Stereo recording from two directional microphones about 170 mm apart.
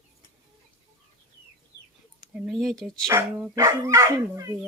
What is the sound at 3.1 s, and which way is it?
Speech, 15° right (ahead or behind).